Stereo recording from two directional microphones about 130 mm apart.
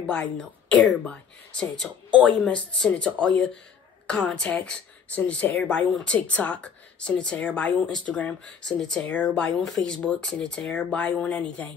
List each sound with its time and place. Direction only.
0.0 s speech: 5° left (ahead or behind)